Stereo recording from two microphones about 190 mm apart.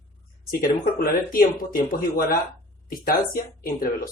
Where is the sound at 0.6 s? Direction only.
50° left (ahead or behind).